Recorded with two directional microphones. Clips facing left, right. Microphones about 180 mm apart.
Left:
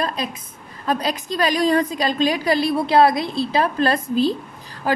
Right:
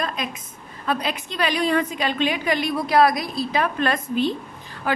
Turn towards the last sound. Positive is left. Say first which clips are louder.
# left 3 dB
turn(degrees=35)  # may be behind; listen again after turning